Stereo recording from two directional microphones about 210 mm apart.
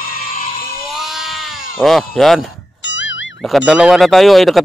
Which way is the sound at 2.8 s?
60° left (ahead or behind).